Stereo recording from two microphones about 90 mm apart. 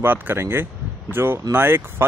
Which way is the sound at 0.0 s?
25° right (ahead or behind).